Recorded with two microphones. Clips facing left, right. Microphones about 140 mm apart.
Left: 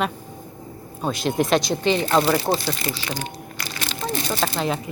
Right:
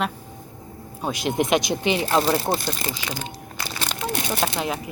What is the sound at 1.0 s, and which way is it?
Speech, 15° right (ahead or behind).